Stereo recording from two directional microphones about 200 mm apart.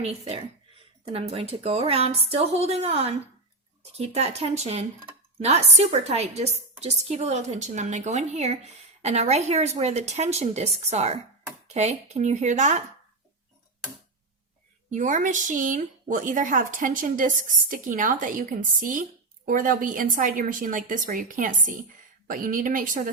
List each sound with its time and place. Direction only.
0.0 s a woman's voice: 30° right (ahead or behind)
14.8 s a woman's voice: 40° right (ahead or behind)